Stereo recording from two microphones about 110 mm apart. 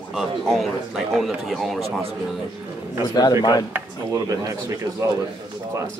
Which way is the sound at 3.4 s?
35° left (ahead or behind).